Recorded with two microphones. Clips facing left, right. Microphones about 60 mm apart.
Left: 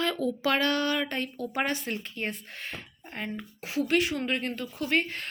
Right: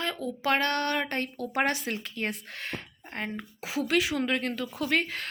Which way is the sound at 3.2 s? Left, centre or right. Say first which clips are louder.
Right 1 dB; right.